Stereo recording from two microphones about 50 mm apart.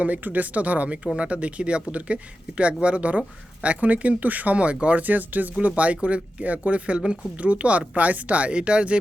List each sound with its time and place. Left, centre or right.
0.0 s speech: right